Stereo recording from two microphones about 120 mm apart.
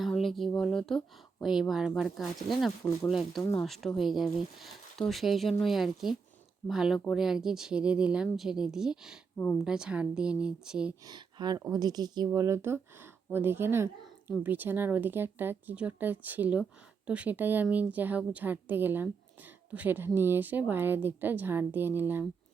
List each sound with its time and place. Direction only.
0.0 s a woman's voice: centre (ahead or behind)
11.0 s a woman's voice: 35° right (ahead or behind); by 22.3 s 15° right (ahead or behind)